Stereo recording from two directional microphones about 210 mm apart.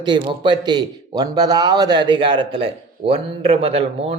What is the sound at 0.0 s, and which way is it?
A man's voice, 20° right (ahead or behind).